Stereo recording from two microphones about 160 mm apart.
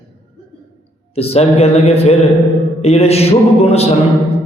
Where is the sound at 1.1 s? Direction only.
40° left (ahead or behind).